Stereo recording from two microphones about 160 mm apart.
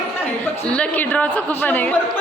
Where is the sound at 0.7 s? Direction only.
10° left (ahead or behind).